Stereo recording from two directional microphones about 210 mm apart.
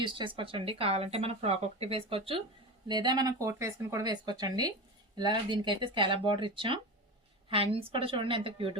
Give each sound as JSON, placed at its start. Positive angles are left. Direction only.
{"t": 0.0, "sound": "speech", "side_deg": -25}